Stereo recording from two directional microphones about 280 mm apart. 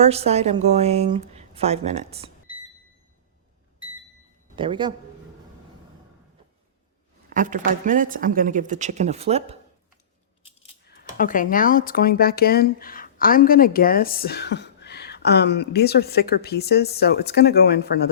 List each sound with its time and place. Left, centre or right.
0.0 s a woman's voice: right
4.5 s a man's voice: centre
7.3 s a woman's voice: right
11.2 s speech: left